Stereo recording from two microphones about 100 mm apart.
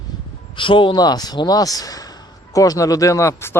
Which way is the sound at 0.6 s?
55° left (ahead or behind).